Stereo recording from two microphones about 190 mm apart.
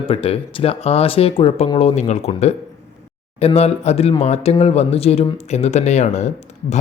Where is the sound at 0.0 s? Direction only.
30° left (ahead or behind).